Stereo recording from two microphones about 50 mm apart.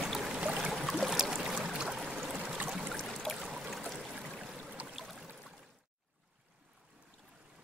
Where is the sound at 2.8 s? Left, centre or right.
Centre.